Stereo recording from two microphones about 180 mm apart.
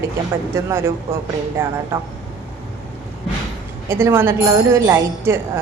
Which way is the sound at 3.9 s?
15° right (ahead or behind).